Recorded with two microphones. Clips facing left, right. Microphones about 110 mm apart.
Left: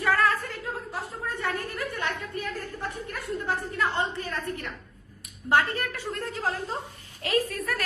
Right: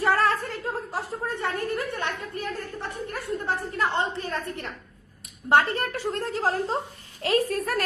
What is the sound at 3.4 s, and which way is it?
A woman's voice, 30° right (ahead or behind).